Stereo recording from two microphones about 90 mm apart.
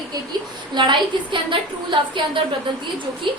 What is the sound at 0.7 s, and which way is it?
A woman's voice, 60° right (ahead or behind).